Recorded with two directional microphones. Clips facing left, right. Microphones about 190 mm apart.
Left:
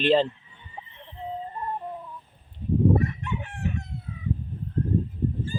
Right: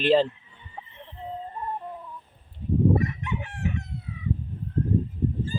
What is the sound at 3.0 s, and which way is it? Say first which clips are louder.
Chicken: even; 30° left (ahead or behind).